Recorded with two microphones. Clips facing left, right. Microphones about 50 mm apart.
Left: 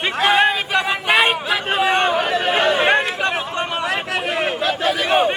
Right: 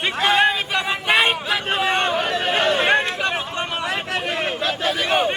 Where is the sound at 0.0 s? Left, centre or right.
Centre.